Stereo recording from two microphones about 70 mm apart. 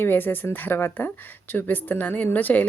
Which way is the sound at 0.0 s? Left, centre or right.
Left.